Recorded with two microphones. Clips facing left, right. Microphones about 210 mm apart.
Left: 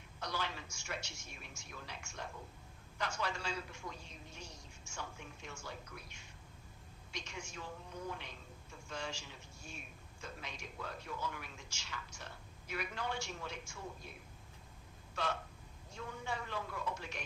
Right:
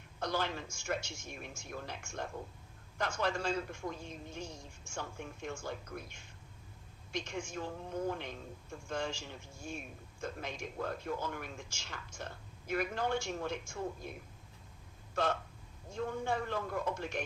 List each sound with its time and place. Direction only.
0.2 s a man's voice: 50° right (ahead or behind)
15.1 s a man's voice: 50° right (ahead or behind)